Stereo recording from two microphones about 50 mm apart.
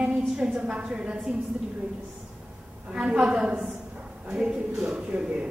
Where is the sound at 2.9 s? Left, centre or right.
Right.